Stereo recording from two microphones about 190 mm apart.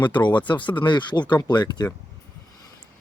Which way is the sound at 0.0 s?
25° left (ahead or behind).